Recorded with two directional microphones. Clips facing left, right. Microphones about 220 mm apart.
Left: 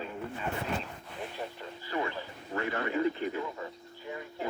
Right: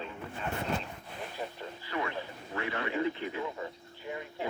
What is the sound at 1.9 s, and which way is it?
A man's voice, 35° left (ahead or behind).